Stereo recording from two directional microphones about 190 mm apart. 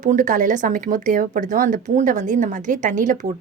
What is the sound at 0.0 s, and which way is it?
Speech, 40° right (ahead or behind).